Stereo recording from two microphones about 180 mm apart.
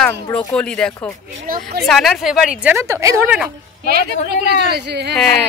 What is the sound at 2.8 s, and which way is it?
Speech, 15° right (ahead or behind).